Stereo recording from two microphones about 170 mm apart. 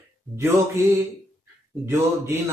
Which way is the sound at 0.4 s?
15° right (ahead or behind).